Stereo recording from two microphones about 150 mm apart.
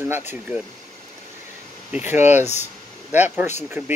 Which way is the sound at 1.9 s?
15° right (ahead or behind).